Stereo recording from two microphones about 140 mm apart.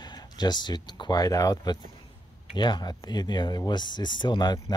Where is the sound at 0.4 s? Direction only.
30° left (ahead or behind).